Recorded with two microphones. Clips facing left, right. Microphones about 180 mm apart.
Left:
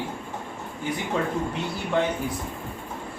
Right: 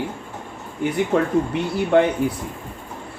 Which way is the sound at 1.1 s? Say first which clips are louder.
Right 6 dB; 60° right (ahead or behind).